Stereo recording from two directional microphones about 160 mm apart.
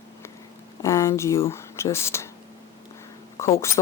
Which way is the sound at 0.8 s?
20° left (ahead or behind).